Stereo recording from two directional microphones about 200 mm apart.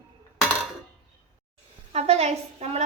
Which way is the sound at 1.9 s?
30° right (ahead or behind).